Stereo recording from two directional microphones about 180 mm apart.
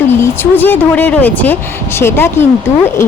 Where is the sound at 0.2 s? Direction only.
10° left (ahead or behind).